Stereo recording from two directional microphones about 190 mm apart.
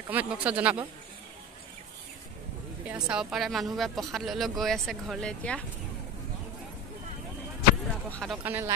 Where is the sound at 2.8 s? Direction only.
5° right (ahead or behind).